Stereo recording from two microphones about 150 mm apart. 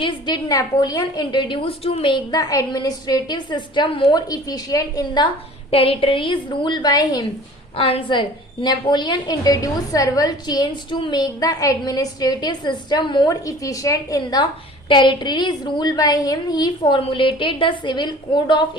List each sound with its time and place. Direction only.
0.0 s a woman's voice: 30° left (ahead or behind)
5.7 s a woman's voice: 40° left (ahead or behind)
7.8 s a woman's voice: 40° left (ahead or behind)